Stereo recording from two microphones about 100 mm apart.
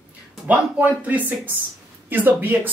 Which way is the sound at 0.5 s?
15° right (ahead or behind).